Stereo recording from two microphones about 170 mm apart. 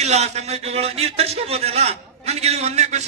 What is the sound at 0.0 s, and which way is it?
A man's voice, 40° right (ahead or behind).